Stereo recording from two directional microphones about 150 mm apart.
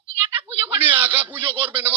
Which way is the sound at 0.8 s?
10° right (ahead or behind).